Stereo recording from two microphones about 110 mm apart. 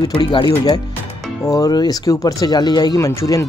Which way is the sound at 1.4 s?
35° left (ahead or behind).